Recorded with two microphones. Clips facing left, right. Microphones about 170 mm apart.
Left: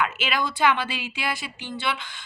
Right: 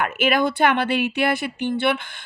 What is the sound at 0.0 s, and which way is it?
Speech, 55° right (ahead or behind).